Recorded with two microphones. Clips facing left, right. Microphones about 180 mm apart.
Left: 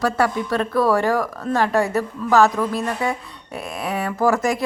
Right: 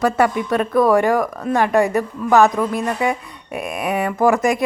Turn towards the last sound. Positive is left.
turn(degrees=-15)  # may be behind; listen again after turning